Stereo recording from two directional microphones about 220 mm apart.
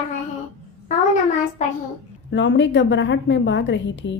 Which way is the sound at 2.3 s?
55° left (ahead or behind).